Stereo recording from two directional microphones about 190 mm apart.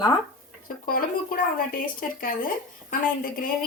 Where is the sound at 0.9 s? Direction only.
50° left (ahead or behind).